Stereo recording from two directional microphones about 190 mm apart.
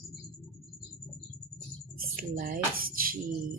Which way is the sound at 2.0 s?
50° right (ahead or behind).